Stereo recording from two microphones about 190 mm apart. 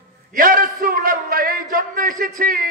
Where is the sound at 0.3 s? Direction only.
45° right (ahead or behind).